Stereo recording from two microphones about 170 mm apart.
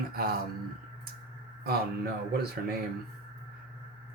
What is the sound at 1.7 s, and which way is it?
Speech, 65° right (ahead or behind).